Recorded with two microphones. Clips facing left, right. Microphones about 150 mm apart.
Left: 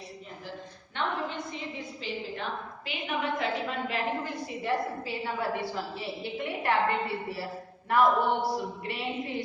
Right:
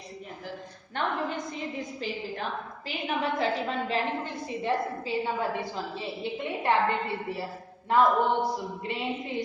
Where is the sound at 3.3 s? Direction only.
30° right (ahead or behind).